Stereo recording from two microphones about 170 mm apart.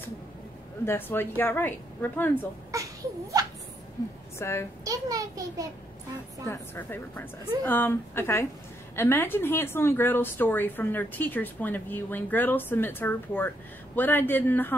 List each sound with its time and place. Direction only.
0.8 s a woman's voice: 10° left (ahead or behind)
2.7 s a sound: 20° right (ahead or behind)
4.4 s a woman's voice: 15° left (ahead or behind)
4.8 s a child's voice: 20° right (ahead or behind)
6.4 s a woman's voice: 15° left (ahead or behind)